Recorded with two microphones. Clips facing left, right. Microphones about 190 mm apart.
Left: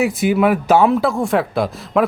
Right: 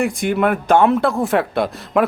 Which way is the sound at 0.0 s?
5° left (ahead or behind).